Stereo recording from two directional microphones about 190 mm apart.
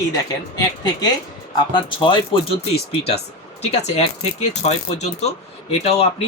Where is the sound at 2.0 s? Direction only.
25° left (ahead or behind).